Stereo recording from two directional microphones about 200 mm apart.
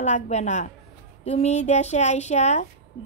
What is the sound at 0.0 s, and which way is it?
Speech, 35° left (ahead or behind).